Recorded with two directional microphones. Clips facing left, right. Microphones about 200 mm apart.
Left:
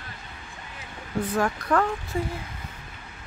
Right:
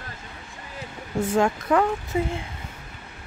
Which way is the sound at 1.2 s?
25° right (ahead or behind).